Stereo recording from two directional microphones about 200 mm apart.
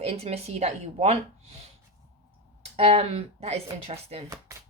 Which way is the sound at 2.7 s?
30° right (ahead or behind).